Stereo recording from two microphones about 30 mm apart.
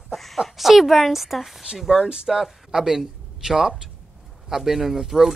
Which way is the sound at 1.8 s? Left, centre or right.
Centre.